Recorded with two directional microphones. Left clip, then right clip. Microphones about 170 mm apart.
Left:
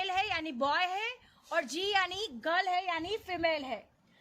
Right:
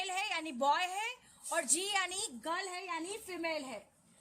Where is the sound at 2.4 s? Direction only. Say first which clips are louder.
Left 10 dB; 40° left (ahead or behind).